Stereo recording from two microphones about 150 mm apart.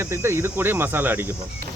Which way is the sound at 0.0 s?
20° right (ahead or behind).